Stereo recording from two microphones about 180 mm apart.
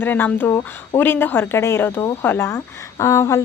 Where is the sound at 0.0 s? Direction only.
10° left (ahead or behind).